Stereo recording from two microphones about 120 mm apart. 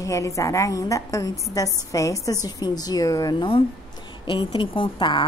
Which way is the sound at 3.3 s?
45° left (ahead or behind).